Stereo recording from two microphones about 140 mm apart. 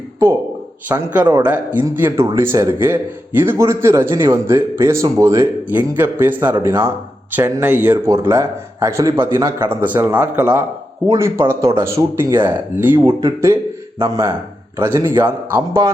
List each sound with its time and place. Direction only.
0.9 s a man's voice: 10° right (ahead or behind)